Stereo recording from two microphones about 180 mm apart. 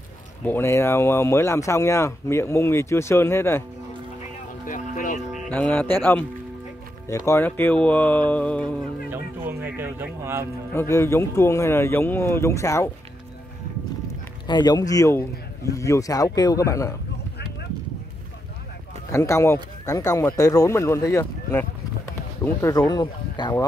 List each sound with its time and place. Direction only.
0.5 s speech: 15° left (ahead or behind)
4.6 s music: 45° left (ahead or behind)
5.3 s speech: 5° left (ahead or behind)
7.2 s speech: 10° left (ahead or behind)
9.1 s speech: 10° right (ahead or behind)
10.7 s speech: 15° left (ahead or behind)
14.5 s a man's voice: 20° left (ahead or behind)
19.1 s speech: 15° left (ahead or behind)